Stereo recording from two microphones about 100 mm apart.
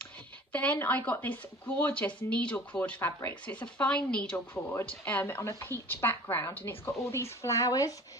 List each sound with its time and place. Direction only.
0.5 s speech: 15° left (ahead or behind)
4.5 s a woman's voice: 25° left (ahead or behind)